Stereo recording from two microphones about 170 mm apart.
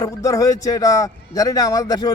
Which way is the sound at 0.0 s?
20° left (ahead or behind).